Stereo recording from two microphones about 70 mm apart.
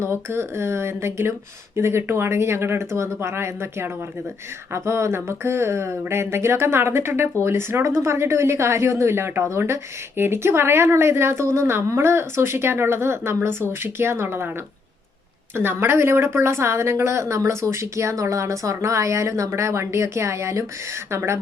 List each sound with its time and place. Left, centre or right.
0.0 s a woman's voice: right
15.5 s a woman's voice: right